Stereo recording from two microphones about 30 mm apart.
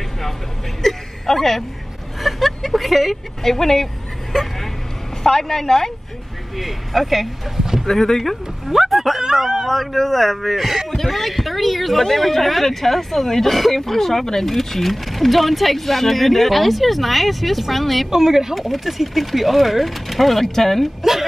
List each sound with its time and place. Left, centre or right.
0.8 s a sound: centre
2.2 s speech: centre
3.4 s speech: centre
6.5 s speech: centre
7.5 s speech: centre
7.8 s speech: centre
8.2 s speech: centre
9.7 s speech: centre
18.1 s speech: centre
18.5 s speech: centre